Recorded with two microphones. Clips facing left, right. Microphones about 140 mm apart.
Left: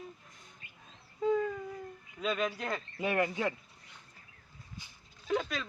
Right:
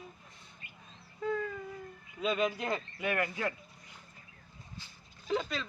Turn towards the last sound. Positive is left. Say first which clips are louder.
# left 1 dB
turn(degrees=0)  # may be behind; listen again after turning